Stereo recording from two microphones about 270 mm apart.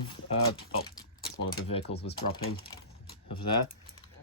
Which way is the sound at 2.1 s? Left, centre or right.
Left.